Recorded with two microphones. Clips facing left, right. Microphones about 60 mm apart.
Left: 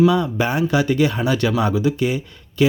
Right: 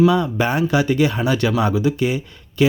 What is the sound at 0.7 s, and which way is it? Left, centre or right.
Speech, right.